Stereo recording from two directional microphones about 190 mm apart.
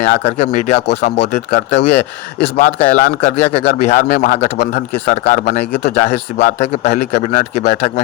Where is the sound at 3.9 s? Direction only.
55° left (ahead or behind).